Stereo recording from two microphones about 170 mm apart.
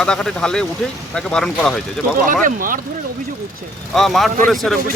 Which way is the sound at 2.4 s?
55° right (ahead or behind).